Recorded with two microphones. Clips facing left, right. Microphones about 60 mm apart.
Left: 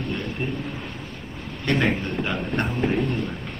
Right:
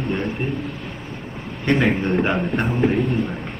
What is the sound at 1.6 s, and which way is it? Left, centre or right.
A man's voice, centre.